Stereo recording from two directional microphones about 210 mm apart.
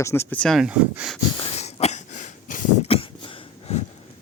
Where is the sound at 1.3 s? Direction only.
30° left (ahead or behind).